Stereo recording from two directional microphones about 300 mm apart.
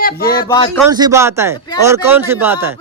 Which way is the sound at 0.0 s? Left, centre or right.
Left.